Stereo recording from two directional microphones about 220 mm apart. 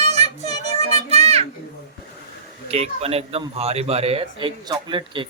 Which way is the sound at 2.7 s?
30° right (ahead or behind).